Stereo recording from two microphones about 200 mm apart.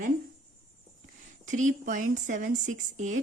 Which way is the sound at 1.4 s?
40° right (ahead or behind).